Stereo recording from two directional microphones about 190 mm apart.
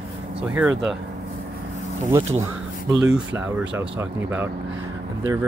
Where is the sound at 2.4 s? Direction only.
20° right (ahead or behind).